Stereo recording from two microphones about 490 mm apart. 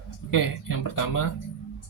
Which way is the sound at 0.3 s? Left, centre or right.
Left.